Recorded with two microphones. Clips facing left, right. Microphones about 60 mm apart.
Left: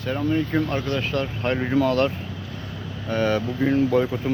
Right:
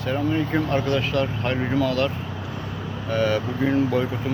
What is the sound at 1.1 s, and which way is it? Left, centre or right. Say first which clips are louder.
Speech: right 2 dB; centre.